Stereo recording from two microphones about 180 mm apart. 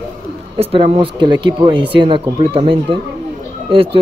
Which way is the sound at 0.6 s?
30° right (ahead or behind).